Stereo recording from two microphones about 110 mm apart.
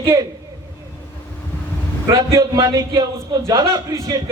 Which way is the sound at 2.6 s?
35° right (ahead or behind).